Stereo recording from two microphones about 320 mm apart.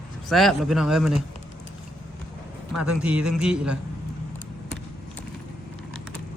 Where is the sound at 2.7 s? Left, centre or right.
Centre.